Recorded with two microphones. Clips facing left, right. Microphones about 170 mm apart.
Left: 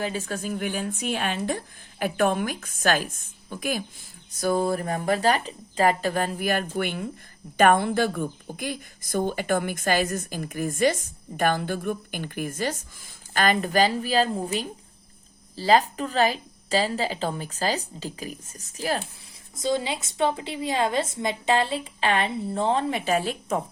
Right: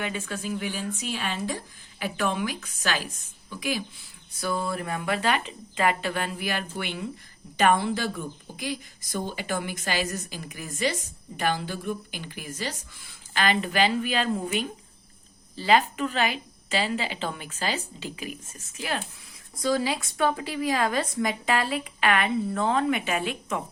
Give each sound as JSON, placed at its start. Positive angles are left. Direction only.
{"t": 0.0, "sound": "speech", "side_deg": 35}
{"t": 19.6, "sound": "a woman's voice", "side_deg": 25}